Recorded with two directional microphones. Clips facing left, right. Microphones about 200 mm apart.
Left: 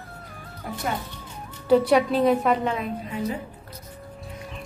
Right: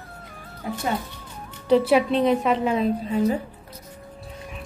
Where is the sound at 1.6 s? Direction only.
Centre (ahead or behind).